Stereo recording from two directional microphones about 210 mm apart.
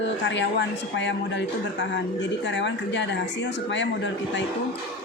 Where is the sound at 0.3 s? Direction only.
55° left (ahead or behind).